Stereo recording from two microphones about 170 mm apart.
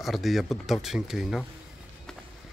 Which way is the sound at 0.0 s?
Centre (ahead or behind).